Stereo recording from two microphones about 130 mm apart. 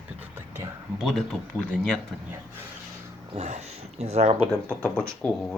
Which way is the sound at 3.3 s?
60° right (ahead or behind).